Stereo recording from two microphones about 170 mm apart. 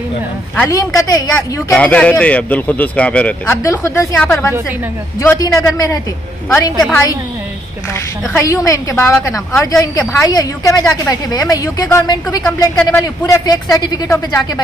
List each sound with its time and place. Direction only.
0.6 s a woman's voice: 20° left (ahead or behind)
1.7 s a woman's voice: 10° left (ahead or behind)
8.3 s a woman's voice: 15° left (ahead or behind)